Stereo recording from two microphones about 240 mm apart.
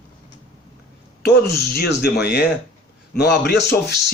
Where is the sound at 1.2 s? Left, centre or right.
Left.